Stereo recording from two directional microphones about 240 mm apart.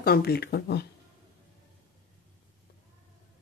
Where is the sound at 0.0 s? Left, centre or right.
Left.